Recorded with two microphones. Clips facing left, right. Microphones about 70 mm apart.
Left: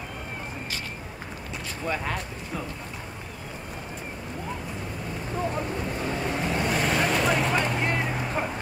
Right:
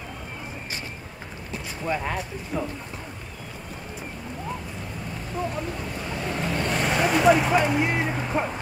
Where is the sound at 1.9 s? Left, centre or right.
Centre.